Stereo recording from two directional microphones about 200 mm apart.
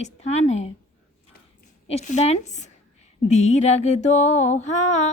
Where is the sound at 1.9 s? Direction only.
35° left (ahead or behind).